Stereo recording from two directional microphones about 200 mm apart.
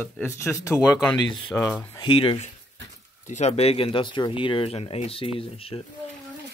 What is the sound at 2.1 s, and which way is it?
Speech, 25° left (ahead or behind).